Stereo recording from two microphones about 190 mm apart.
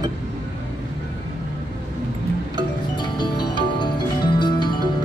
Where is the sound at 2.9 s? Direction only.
25° left (ahead or behind).